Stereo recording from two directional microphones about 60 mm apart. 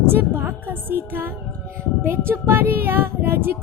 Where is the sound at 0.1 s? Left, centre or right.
Right.